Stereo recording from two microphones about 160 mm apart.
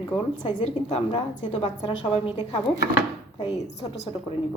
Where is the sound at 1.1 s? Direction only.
35° left (ahead or behind).